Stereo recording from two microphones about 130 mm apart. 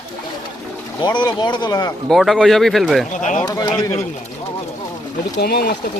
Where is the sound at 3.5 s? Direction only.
30° left (ahead or behind).